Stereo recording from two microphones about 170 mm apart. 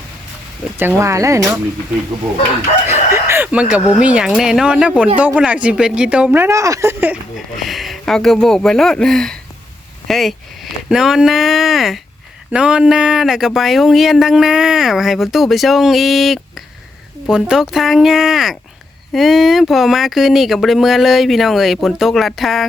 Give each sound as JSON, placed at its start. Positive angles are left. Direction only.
{"t": 0.8, "sound": "speech", "side_deg": -15}
{"t": 2.8, "sound": "chicken", "side_deg": -15}
{"t": 4.0, "sound": "speech", "side_deg": -5}